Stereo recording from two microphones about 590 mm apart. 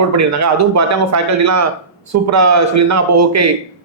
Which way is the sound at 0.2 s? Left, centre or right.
Right.